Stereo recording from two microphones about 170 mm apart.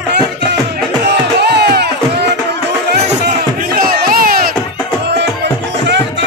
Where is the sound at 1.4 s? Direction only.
75° right (ahead or behind).